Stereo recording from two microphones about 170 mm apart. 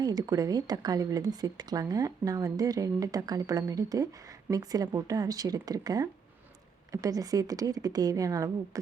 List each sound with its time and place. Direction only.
0.0 s speech: 20° right (ahead or behind)